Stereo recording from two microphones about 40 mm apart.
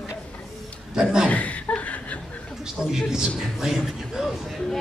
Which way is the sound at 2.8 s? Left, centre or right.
Centre.